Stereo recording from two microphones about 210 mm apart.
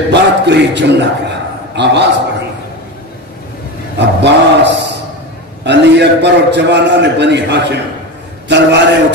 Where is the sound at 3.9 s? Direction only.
55° right (ahead or behind).